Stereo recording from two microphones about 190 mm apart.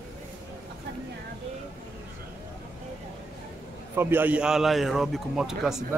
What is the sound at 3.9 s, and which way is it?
A man's voice, 10° right (ahead or behind).